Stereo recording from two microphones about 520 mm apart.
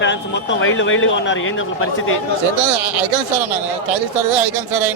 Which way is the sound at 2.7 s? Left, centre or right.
Right.